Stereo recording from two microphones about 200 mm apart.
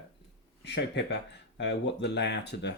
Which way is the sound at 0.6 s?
60° left (ahead or behind).